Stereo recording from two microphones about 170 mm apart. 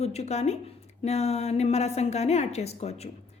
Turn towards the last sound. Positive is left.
turn(degrees=40)  # may be behind; listen again after turning